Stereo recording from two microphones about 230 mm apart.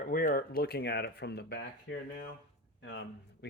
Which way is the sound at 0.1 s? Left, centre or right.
Left.